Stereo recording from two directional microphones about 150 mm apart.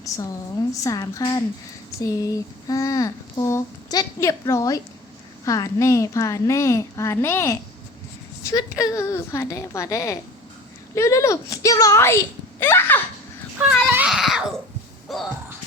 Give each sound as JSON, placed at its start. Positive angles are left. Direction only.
{"t": 0.0, "sound": "speech", "side_deg": 20}
{"t": 13.6, "sound": "a sound", "side_deg": -5}
{"t": 15.1, "sound": "music", "side_deg": 0}